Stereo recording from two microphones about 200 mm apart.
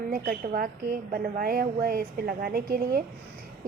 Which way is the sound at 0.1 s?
45° right (ahead or behind).